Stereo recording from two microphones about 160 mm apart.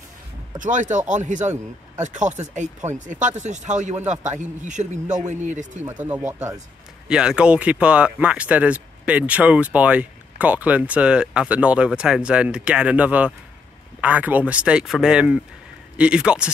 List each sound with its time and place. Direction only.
0.6 s speech: 55° right (ahead or behind)
6.0 s speech: 10° right (ahead or behind)